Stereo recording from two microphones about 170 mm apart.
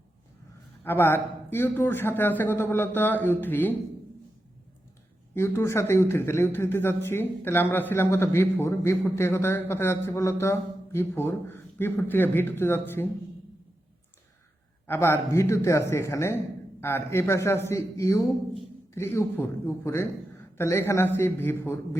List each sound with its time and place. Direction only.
0.9 s speech: 15° left (ahead or behind)
5.3 s a man's voice: 15° left (ahead or behind)
14.8 s speech: 15° left (ahead or behind)